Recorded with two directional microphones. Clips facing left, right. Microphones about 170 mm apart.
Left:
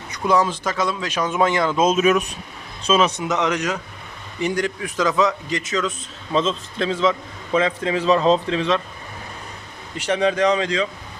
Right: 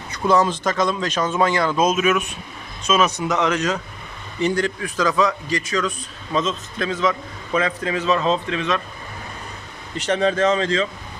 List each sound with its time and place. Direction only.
0.1 s a man's voice: 10° left (ahead or behind); by 8.8 s 30° left (ahead or behind)
10.0 s speech: 10° left (ahead or behind)